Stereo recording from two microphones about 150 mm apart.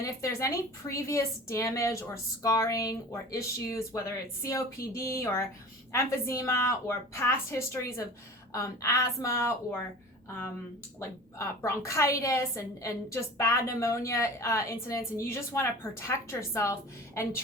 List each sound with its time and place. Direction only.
0.0 s a woman's voice: 20° left (ahead or behind)
11.3 s a woman's voice: 20° left (ahead or behind)